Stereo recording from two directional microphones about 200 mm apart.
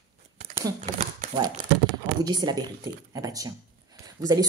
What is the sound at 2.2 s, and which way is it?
Speech, 20° right (ahead or behind).